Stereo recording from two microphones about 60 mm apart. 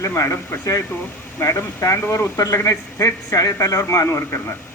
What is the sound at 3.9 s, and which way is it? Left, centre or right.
Speech, left.